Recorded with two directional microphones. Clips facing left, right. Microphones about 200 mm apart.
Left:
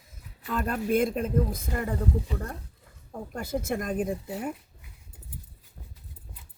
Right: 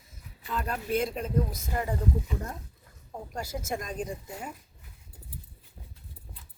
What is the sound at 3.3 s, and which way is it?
Speech, 55° left (ahead or behind).